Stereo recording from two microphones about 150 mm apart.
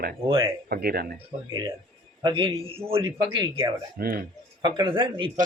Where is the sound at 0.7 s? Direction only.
90° right.